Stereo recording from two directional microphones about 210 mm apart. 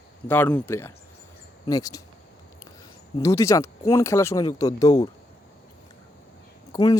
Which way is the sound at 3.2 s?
15° left (ahead or behind).